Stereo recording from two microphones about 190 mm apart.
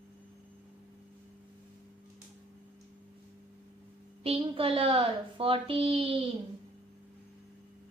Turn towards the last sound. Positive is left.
turn(degrees=-30)  # may be behind; listen again after turning